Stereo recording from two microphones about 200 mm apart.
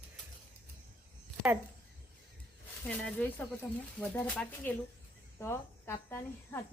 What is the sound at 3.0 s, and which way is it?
Speech, 5° left (ahead or behind).